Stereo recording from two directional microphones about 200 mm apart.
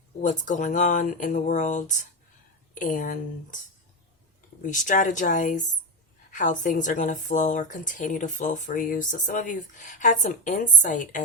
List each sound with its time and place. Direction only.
0.2 s a woman's voice: 40° left (ahead or behind)
4.6 s a woman's voice: 40° left (ahead or behind)